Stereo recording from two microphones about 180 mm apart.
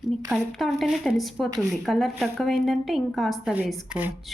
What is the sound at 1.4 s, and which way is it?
Speech, 20° right (ahead or behind).